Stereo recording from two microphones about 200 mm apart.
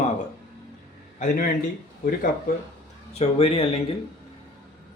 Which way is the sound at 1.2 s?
45° left (ahead or behind).